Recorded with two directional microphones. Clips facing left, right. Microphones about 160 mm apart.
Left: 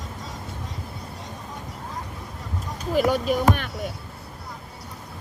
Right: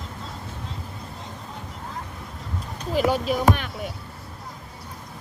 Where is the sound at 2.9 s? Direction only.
45° left (ahead or behind).